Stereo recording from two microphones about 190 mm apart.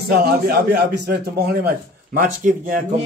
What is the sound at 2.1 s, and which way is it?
Speech, 45° right (ahead or behind).